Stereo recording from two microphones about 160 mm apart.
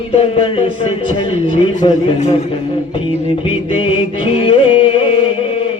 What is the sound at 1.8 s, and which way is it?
Speech, 30° left (ahead or behind).